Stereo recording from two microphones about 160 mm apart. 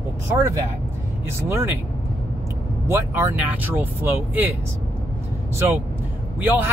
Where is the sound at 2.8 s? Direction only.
15° right (ahead or behind).